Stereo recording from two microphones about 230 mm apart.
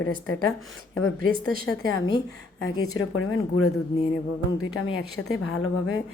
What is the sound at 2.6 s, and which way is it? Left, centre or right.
Speech, left.